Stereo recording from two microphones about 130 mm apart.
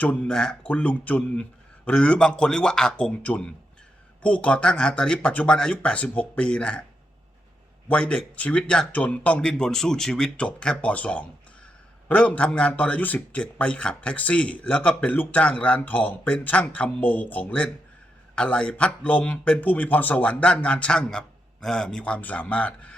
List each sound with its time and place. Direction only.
0.0 s a man's voice: 10° left (ahead or behind)
7.9 s a man's voice: 10° left (ahead or behind)